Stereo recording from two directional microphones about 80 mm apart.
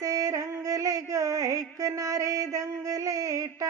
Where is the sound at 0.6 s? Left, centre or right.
Right.